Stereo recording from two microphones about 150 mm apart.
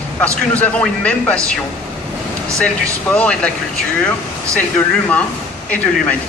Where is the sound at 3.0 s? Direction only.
5° left (ahead or behind).